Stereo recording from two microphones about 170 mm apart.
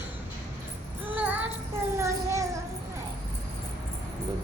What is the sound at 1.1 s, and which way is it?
Music, 10° right (ahead or behind).